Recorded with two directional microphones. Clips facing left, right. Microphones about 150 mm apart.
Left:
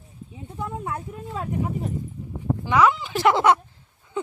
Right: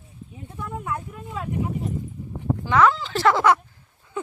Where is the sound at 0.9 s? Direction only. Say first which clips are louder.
Even; 35° left (ahead or behind).